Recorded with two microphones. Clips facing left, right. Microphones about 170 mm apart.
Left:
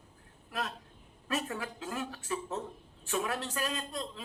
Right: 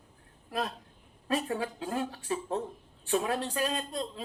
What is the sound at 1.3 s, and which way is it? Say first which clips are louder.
A woman's voice: right 5 dB; 30° right (ahead or behind).